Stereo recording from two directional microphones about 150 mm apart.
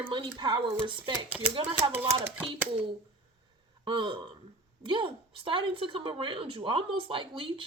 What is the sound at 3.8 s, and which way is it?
A woman's voice, 30° right (ahead or behind).